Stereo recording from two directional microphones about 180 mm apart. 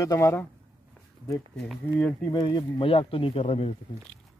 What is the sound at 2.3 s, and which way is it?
Speech, 25° left (ahead or behind).